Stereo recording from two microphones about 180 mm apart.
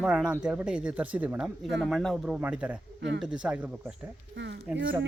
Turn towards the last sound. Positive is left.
turn(degrees=-5)  # may be behind; listen again after turning